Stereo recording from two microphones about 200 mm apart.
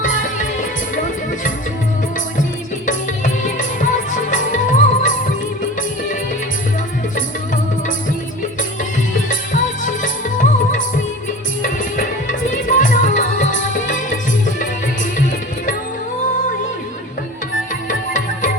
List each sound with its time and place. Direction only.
0.0 s music: 40° left (ahead or behind)
2.8 s music: 40° left (ahead or behind)
9.3 s music: 40° left (ahead or behind)
17.8 s music: 40° left (ahead or behind)